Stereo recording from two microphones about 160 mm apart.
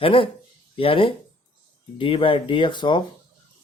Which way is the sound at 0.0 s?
35° left (ahead or behind).